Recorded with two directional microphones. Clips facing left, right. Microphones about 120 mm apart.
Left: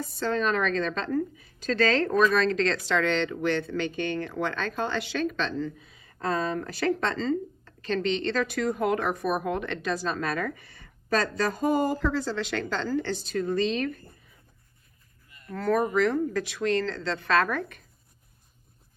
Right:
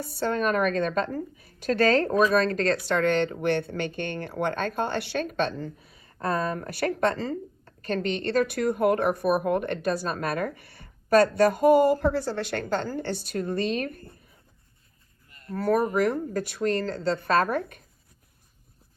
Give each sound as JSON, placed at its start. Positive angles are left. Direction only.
{"t": 0.1, "sound": "a woman's voice", "side_deg": -55}
{"t": 15.7, "sound": "a woman's voice", "side_deg": -50}